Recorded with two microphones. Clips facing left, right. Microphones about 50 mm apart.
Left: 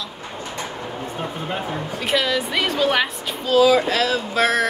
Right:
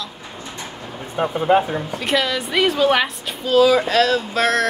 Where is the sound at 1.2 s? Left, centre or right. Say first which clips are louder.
Right 13 dB; right.